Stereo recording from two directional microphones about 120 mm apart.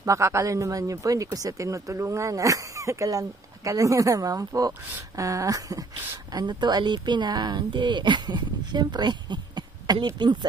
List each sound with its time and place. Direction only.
0.0 s speech: 25° right (ahead or behind)